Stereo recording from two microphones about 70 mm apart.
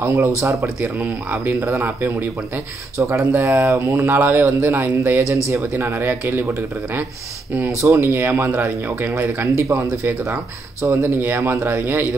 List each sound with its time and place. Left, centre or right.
0.0 s speech: right
0.4 s speech: right
7.8 s speech: right
8.1 s speech: right